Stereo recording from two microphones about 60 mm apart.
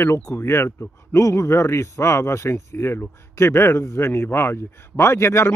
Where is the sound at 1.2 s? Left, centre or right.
Left.